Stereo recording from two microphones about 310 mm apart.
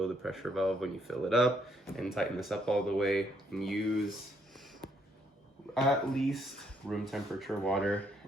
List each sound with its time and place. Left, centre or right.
0.0 s speech: centre
5.7 s speech: centre